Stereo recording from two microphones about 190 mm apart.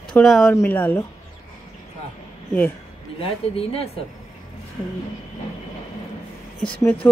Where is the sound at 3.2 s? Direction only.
30° left (ahead or behind).